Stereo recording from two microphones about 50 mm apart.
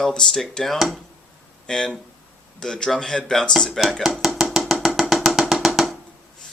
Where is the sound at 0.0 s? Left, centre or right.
Centre.